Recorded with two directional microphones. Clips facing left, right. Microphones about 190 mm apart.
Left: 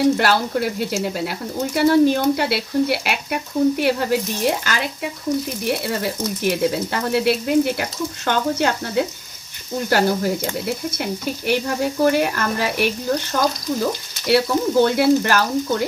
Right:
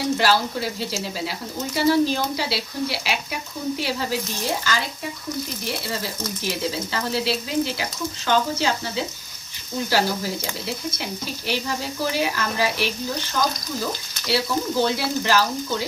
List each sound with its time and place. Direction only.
0.2 s speech: 55° left (ahead or behind)
14.2 s speech: 55° left (ahead or behind)